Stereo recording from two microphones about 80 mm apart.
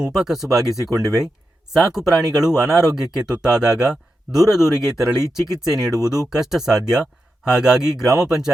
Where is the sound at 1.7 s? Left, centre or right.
Centre.